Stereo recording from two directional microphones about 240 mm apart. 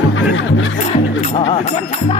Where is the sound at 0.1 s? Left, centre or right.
Left.